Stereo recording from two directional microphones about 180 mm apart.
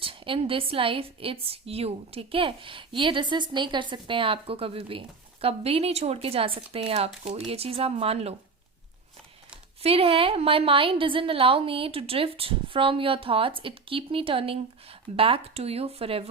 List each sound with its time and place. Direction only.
0.0 s a woman's voice: 30° right (ahead or behind)
9.8 s a woman's voice: 30° right (ahead or behind)